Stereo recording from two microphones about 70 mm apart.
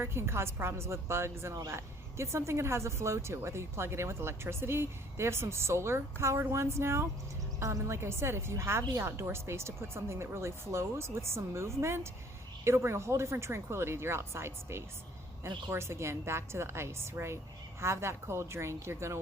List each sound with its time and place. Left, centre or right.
0.0 s speech: right